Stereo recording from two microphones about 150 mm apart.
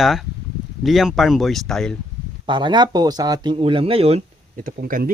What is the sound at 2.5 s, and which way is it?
A man's voice, 30° right (ahead or behind).